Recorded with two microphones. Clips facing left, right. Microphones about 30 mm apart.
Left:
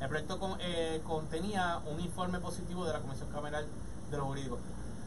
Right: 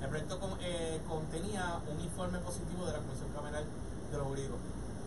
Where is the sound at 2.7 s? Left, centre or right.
Left.